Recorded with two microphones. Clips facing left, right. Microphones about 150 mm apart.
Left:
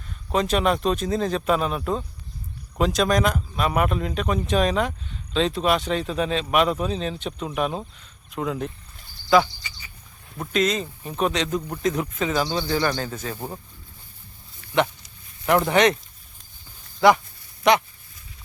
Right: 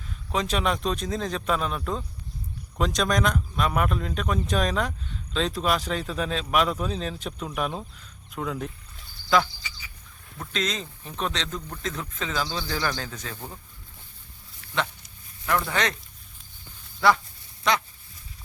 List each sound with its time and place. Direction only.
0.3 s speech: centre (ahead or behind)
15.7 s speech: 20° left (ahead or behind)
17.6 s speech: 20° left (ahead or behind)